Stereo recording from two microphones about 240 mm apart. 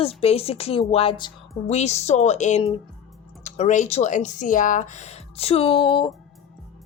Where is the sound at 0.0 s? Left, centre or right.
Left.